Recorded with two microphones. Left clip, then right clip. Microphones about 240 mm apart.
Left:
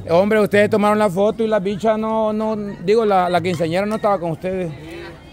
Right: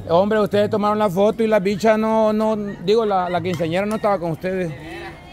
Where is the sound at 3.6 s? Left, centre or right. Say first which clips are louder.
Left 2 dB; centre.